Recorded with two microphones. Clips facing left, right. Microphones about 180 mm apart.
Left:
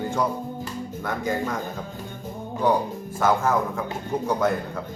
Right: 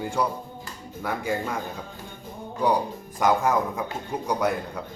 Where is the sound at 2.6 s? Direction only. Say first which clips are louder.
Left 1 dB; 10° right (ahead or behind).